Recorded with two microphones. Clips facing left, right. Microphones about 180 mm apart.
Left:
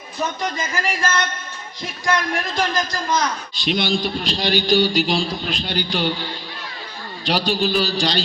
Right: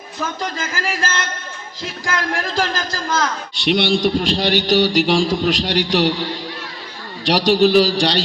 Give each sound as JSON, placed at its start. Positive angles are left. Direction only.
{"t": 0.6, "sound": "music", "side_deg": -90}
{"t": 2.0, "sound": "a man's voice", "side_deg": -90}